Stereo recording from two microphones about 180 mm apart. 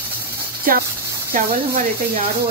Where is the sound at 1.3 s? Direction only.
55° right (ahead or behind).